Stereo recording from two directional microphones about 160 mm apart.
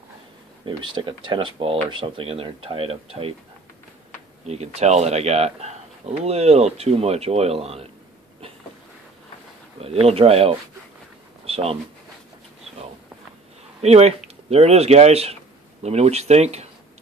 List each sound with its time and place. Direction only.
0.7 s speech: 30° right (ahead or behind)
4.5 s speech: 40° right (ahead or behind)
9.8 s speech: 40° right (ahead or behind)
11.4 s a sound: 40° right (ahead or behind)
13.7 s speech: 40° right (ahead or behind)